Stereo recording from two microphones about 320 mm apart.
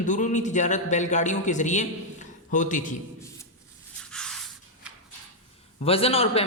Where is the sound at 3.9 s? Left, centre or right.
Centre.